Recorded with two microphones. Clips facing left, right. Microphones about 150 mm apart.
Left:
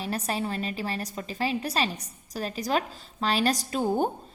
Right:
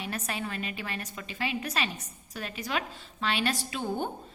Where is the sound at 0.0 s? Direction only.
35° left (ahead or behind).